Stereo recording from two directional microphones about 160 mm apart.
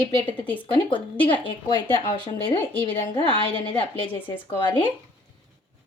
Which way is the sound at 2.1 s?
30° left (ahead or behind).